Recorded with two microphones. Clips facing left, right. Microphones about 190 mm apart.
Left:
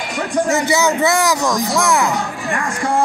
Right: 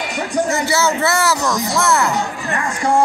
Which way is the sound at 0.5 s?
15° left (ahead or behind).